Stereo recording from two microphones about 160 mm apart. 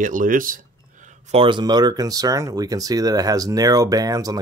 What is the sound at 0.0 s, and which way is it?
Speech, 55° right (ahead or behind).